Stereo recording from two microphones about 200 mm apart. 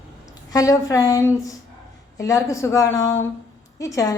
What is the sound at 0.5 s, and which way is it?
A woman's voice, 15° left (ahead or behind).